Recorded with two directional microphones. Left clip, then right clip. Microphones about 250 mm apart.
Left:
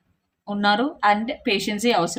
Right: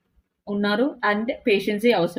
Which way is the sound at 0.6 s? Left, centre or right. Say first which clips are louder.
Left 3 dB; centre.